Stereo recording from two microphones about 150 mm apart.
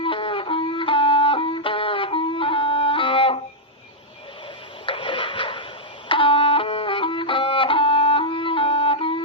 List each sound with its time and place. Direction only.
0.0 s music: 35° left (ahead or behind)
4.9 s a sound: 35° left (ahead or behind)
6.1 s music: 35° left (ahead or behind)